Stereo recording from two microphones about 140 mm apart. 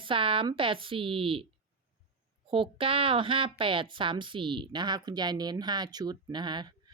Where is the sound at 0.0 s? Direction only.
40° right (ahead or behind).